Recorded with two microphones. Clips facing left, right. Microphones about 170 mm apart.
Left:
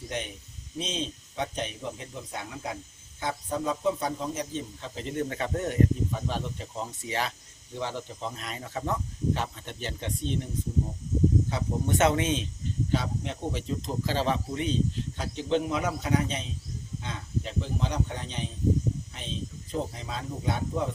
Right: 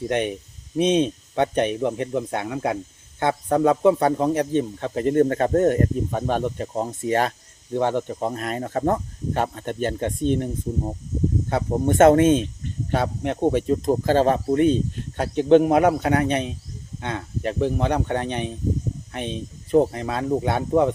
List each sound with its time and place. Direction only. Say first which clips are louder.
0.1 s speech: right 10 dB; 65° right (ahead or behind)